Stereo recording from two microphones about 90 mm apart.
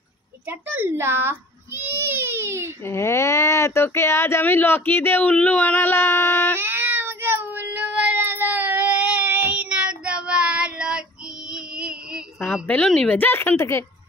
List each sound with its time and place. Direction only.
0.5 s baby cry: 20° right (ahead or behind)
2.8 s speech: 30° left (ahead or behind)
5.3 s speech: 15° left (ahead or behind)
6.6 s cat: 25° right (ahead or behind)
12.6 s a woman's voice: 10° left (ahead or behind)
13.2 s speech: 25° left (ahead or behind)